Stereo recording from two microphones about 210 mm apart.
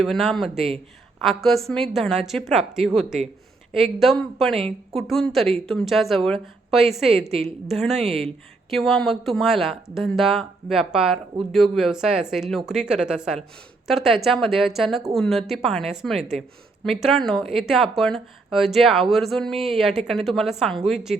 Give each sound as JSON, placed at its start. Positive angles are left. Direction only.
{"t": 0.0, "sound": "a woman's voice", "side_deg": 0}
{"t": 8.0, "sound": "speech", "side_deg": -30}
{"t": 8.7, "sound": "a woman's voice", "side_deg": 0}